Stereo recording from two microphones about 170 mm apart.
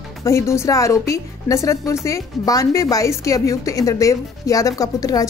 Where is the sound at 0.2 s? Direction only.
15° left (ahead or behind).